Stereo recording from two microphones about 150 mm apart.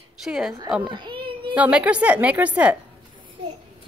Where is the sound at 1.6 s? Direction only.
10° right (ahead or behind).